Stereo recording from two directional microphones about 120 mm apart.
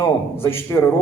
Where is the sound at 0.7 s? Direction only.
20° left (ahead or behind).